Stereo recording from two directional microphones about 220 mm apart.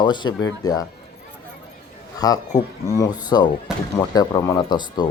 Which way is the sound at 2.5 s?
35° left (ahead or behind).